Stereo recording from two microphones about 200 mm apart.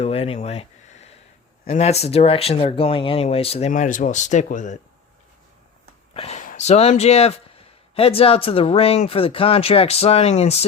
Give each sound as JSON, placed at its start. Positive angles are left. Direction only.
{"t": 0.0, "sound": "a sound", "side_deg": 30}
{"t": 1.6, "sound": "speech", "side_deg": 35}
{"t": 6.1, "sound": "speech", "side_deg": 35}